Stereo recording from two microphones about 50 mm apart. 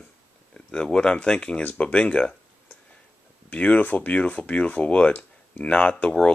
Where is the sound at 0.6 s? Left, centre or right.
Centre.